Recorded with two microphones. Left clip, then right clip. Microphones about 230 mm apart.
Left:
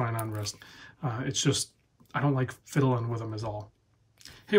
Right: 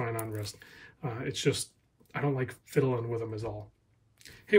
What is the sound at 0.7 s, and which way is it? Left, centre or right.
Speech, centre.